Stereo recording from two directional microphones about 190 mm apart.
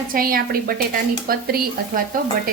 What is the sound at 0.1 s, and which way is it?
Speech, 50° right (ahead or behind).